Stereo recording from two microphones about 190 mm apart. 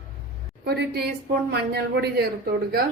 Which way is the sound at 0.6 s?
55° right (ahead or behind).